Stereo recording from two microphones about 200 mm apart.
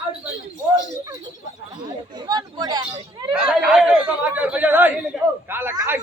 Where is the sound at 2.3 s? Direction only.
20° right (ahead or behind).